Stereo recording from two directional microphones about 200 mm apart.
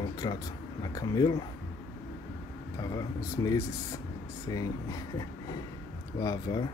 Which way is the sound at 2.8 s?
15° left (ahead or behind).